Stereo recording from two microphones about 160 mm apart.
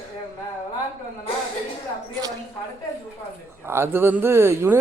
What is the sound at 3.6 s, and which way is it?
Speech, 15° right (ahead or behind).